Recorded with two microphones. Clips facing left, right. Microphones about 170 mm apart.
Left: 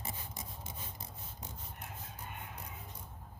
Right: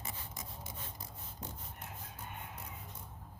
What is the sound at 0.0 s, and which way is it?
Rub, 25° left (ahead or behind).